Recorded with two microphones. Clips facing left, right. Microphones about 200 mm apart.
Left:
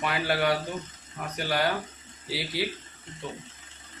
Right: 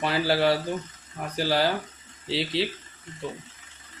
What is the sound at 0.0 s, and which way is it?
Speech, 30° right (ahead or behind).